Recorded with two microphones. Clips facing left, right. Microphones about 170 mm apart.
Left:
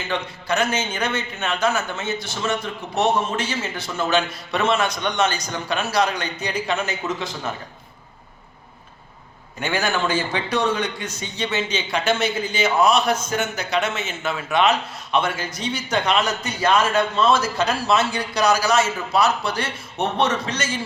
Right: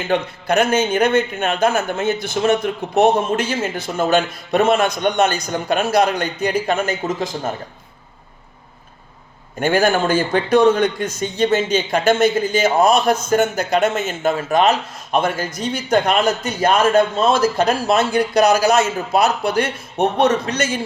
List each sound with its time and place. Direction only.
0.1 s a man's voice: 55° right (ahead or behind)
9.6 s a man's voice: 50° right (ahead or behind)